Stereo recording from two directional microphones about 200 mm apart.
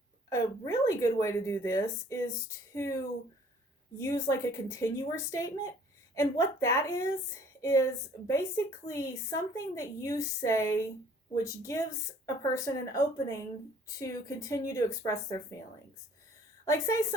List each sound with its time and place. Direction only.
0.3 s speech: 15° left (ahead or behind)
16.6 s speech: 15° left (ahead or behind)